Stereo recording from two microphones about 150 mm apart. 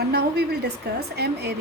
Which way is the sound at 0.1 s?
90° right.